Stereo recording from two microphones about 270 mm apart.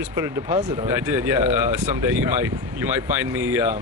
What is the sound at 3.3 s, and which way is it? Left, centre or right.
Speech, centre.